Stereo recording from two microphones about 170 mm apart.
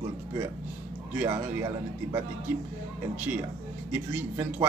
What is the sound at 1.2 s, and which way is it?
Speech, 20° right (ahead or behind).